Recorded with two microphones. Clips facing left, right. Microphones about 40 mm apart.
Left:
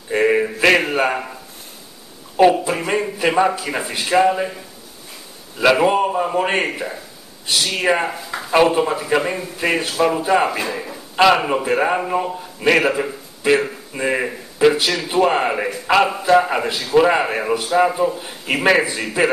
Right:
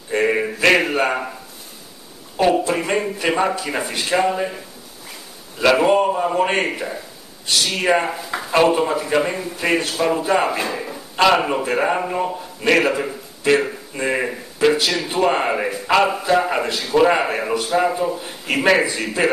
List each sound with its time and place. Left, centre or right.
0.1 s a sound: centre
0.6 s a man's voice: centre
2.7 s a man's voice: centre
5.6 s a man's voice: centre